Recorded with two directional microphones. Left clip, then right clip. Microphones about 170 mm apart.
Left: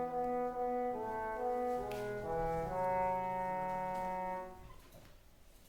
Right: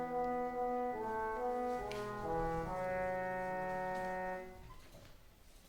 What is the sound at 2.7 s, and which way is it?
Brass instrument, 25° left (ahead or behind).